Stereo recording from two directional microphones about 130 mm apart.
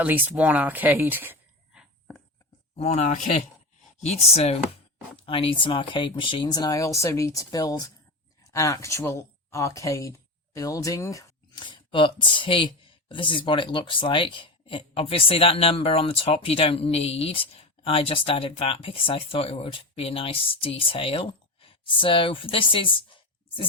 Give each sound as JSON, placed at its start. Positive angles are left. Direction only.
{"t": 0.0, "sound": "speech", "side_deg": -10}
{"t": 2.7, "sound": "speech", "side_deg": 60}
{"t": 5.2, "sound": "speech", "side_deg": 45}
{"t": 11.6, "sound": "speech", "side_deg": 40}